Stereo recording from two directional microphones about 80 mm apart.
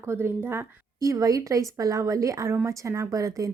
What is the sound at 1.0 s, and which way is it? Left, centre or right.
A woman's voice, right.